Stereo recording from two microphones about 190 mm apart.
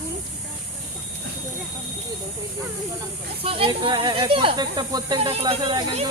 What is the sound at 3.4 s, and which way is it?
Speech, 30° right (ahead or behind).